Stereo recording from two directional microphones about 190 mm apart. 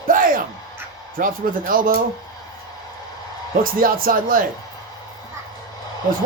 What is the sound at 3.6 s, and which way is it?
Speech, 50° right (ahead or behind).